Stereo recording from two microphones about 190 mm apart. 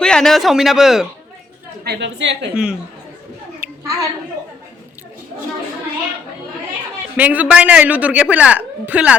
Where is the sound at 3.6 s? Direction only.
20° right (ahead or behind).